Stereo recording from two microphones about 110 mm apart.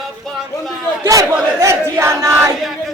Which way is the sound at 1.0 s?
30° right (ahead or behind).